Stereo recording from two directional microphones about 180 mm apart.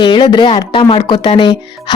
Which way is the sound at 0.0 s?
25° left (ahead or behind).